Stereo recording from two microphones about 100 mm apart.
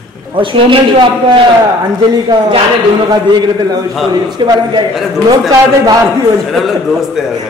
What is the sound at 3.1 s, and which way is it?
A man's voice, 45° right (ahead or behind).